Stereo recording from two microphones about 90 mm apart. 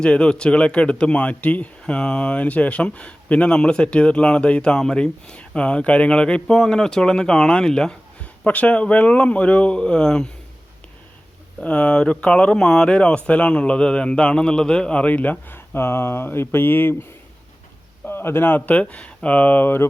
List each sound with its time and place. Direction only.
0.0 s speech: 10° left (ahead or behind)
11.6 s speech: 15° left (ahead or behind)